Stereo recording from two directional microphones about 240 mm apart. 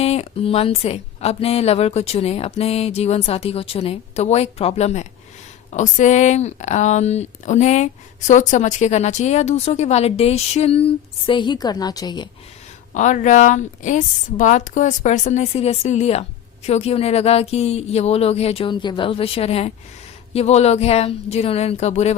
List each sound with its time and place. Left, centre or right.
0.0 s a woman's voice: left
12.9 s a woman's voice: left